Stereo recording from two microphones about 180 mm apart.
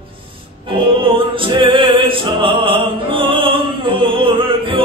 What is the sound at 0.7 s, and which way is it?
Music, 30° right (ahead or behind).